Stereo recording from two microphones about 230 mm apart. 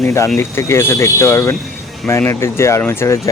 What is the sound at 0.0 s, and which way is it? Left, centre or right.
Speech, centre.